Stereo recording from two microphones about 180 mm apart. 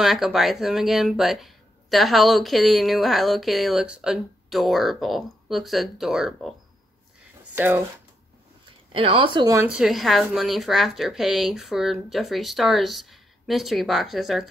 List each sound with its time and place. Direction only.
0.0 s speech: centre (ahead or behind)
7.5 s speech: 10° right (ahead or behind)
8.9 s speech: 30° right (ahead or behind)
9.7 s speech: 5° right (ahead or behind)